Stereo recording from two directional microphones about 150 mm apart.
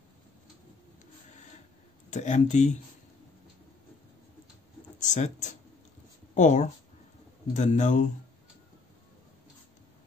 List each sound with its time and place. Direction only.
2.0 s speech: 50° left (ahead or behind)
5.0 s speech: 55° left (ahead or behind)